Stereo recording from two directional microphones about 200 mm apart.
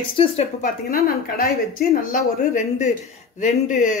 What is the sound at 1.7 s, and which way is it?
Speech, 45° left (ahead or behind).